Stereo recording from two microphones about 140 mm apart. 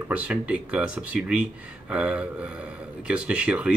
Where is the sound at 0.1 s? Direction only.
10° right (ahead or behind).